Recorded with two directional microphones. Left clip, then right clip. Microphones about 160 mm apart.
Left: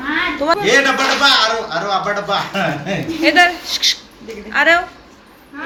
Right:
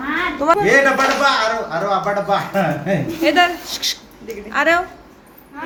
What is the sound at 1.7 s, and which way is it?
Speech, 90° right.